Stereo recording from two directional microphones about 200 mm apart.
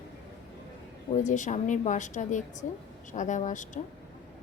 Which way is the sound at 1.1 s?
40° left (ahead or behind).